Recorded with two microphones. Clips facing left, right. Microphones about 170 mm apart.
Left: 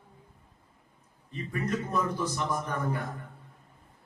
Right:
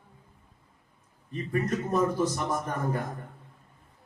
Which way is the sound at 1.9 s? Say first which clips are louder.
Right 5 dB; 45° right (ahead or behind).